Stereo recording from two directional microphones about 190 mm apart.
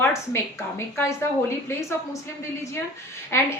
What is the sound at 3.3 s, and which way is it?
Speech, 10° left (ahead or behind).